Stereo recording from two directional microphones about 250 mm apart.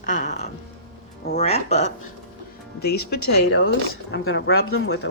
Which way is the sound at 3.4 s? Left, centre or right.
Left.